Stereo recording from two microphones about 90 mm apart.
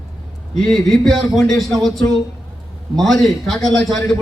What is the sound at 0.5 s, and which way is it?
A man's voice, 5° left (ahead or behind).